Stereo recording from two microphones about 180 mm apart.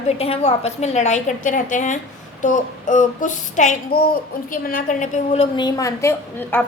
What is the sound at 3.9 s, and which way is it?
Speech, 60° left (ahead or behind).